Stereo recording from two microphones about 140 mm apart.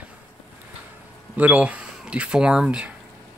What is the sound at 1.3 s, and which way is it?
Speech, 10° right (ahead or behind).